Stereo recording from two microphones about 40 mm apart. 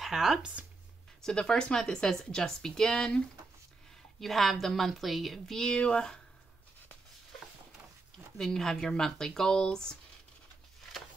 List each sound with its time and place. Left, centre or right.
0.0 s speech: centre
1.2 s speech: centre
4.2 s a woman's voice: centre
5.8 s speech: centre
8.4 s speech: centre